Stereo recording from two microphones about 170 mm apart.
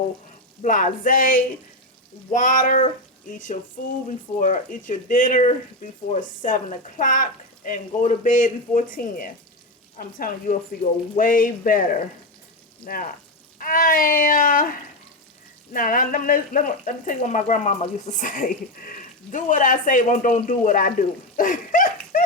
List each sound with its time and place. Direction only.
0.6 s speech: 50° left (ahead or behind)
21.3 s laughter: 50° left (ahead or behind)